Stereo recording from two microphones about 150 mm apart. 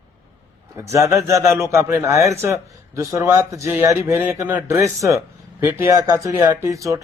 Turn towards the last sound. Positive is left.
turn(degrees=-20)  # may be behind; listen again after turning